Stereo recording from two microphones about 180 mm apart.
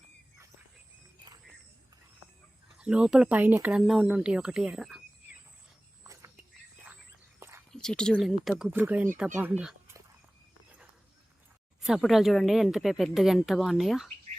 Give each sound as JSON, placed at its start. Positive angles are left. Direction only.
{"t": 2.7, "sound": "speech", "side_deg": -5}
{"t": 6.0, "sound": "a sound", "side_deg": -15}
{"t": 7.3, "sound": "whispering", "side_deg": -15}
{"t": 7.7, "sound": "speech", "side_deg": 5}
{"t": 11.8, "sound": "speech", "side_deg": 0}